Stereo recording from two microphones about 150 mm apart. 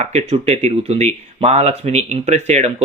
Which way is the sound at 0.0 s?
45° right (ahead or behind).